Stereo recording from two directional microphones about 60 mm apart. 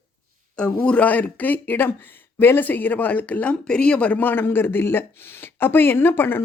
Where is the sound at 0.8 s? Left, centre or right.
Left.